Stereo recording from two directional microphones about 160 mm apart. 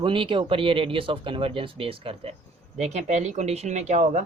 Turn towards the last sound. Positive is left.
turn(degrees=-45)  # may be behind; listen again after turning